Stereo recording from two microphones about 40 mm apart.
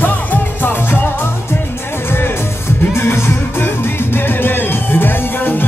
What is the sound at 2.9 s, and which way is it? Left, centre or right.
Music, left.